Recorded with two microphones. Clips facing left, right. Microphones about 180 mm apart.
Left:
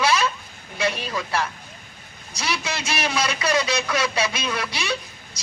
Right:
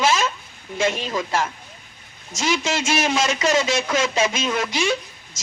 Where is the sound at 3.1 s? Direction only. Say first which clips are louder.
Right 1 dB; 25° right (ahead or behind).